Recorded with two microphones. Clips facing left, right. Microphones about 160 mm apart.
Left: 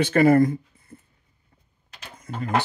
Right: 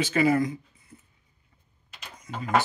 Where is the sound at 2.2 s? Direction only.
55° left (ahead or behind).